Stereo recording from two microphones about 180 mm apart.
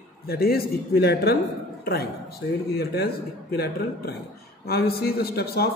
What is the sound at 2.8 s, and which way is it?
A man's voice, 60° left (ahead or behind).